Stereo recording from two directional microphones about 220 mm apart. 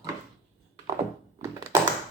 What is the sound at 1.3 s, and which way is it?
Crushing, 15° right (ahead or behind).